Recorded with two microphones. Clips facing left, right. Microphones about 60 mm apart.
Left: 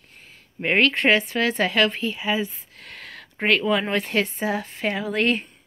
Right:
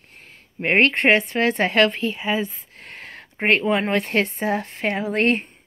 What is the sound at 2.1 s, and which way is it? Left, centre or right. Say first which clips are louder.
Speech: right 1 dB; right.